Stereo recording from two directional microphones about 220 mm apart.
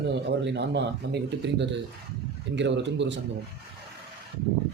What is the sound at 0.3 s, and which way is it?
Speech, 50° right (ahead or behind).